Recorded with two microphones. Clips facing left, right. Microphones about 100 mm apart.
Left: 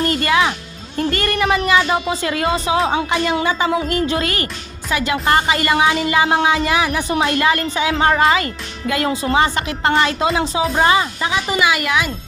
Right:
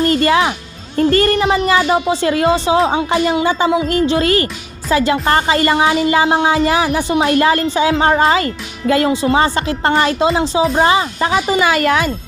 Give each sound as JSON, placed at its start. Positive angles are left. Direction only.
{"t": 0.1, "sound": "speech", "side_deg": -30}
{"t": 11.6, "sound": "speech", "side_deg": -40}